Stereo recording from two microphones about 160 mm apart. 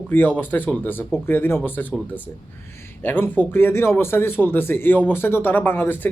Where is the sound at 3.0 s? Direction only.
10° left (ahead or behind).